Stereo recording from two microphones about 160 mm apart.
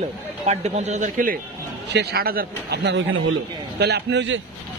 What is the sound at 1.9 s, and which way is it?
A man's voice, 85° right.